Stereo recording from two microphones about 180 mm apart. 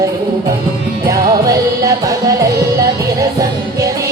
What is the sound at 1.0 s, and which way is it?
Music, 20° right (ahead or behind).